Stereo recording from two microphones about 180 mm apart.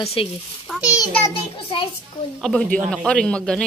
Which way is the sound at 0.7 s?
5° right (ahead or behind).